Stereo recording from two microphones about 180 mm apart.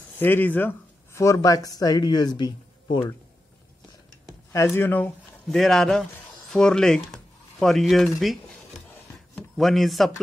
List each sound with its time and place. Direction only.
0.2 s speech: 10° left (ahead or behind)
4.5 s speech: 15° left (ahead or behind)